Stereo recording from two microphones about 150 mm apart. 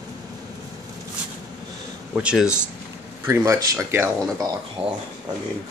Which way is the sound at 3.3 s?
20° right (ahead or behind).